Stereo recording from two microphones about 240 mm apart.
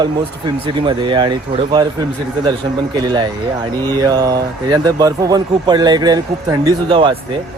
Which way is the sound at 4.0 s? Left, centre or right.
Centre.